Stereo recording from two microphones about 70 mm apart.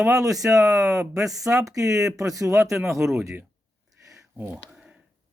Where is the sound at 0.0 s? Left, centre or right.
Right.